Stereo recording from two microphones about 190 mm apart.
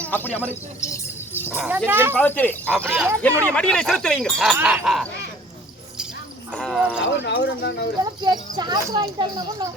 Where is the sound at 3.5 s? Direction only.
5° left (ahead or behind).